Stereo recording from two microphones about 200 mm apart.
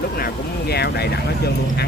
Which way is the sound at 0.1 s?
50° left (ahead or behind).